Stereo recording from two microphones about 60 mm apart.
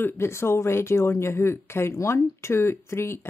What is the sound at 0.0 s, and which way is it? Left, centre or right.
Speech, left.